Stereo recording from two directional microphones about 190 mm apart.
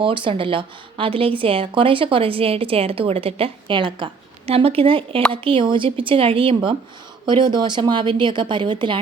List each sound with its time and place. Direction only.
0.0 s a woman's voice: 25° right (ahead or behind)